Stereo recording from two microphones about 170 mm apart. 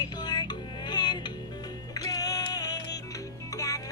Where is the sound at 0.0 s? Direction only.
25° left (ahead or behind).